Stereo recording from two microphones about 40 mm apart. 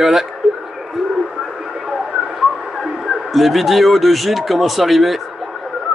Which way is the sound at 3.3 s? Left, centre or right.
Centre.